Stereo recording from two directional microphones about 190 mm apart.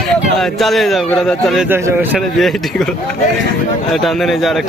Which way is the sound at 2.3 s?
Centre (ahead or behind).